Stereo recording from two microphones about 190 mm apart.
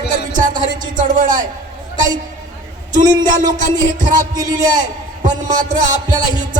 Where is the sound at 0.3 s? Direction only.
45° right (ahead or behind).